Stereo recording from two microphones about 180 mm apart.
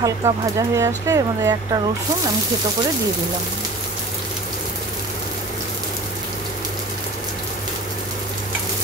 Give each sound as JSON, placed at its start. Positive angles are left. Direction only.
{"t": 0.0, "sound": "speech", "side_deg": -20}